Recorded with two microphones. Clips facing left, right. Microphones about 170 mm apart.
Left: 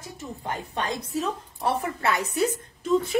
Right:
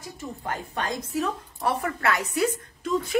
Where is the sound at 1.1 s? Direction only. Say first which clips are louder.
Right 2 dB; 25° left (ahead or behind).